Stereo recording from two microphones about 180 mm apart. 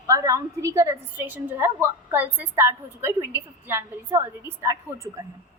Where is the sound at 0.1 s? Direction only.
20° right (ahead or behind).